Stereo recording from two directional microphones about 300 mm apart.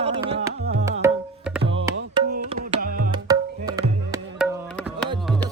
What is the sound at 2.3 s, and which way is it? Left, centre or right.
Music, right.